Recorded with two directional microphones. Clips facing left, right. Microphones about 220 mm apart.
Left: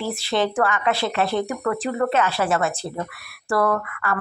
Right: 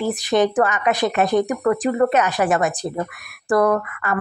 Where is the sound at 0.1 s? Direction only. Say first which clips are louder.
Right 5 dB; 15° right (ahead or behind).